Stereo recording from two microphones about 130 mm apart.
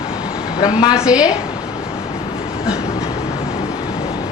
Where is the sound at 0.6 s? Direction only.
30° left (ahead or behind).